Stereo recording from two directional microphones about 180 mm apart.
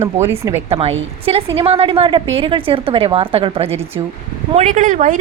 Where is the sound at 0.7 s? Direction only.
35° right (ahead or behind).